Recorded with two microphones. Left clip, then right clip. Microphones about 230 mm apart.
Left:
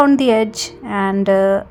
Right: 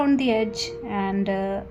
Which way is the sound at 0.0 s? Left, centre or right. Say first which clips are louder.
Left 9 dB; left.